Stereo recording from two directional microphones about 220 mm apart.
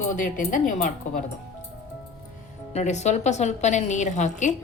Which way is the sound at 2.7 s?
30° left (ahead or behind).